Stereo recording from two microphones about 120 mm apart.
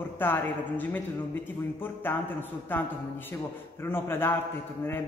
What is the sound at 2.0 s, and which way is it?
Speech, 15° left (ahead or behind).